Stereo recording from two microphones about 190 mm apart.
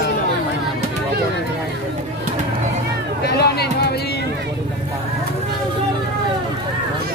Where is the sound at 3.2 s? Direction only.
60° left (ahead or behind).